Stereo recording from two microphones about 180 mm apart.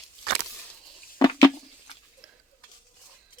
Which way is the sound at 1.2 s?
25° left (ahead or behind).